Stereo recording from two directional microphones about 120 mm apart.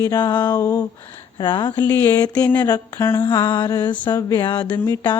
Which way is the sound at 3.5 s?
35° left (ahead or behind).